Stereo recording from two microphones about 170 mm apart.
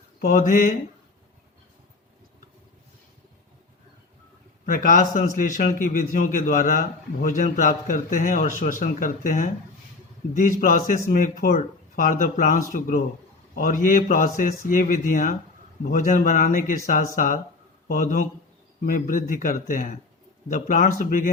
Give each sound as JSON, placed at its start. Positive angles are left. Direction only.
{"t": 0.2, "sound": "a man's voice", "side_deg": 50}
{"t": 4.6, "sound": "a man's voice", "side_deg": 55}